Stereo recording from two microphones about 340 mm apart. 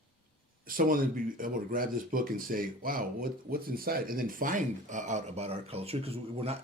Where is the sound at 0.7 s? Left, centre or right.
Right.